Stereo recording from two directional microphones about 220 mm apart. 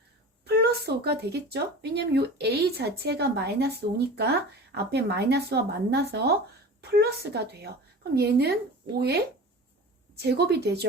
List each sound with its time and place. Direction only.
0.4 s speech: 45° right (ahead or behind)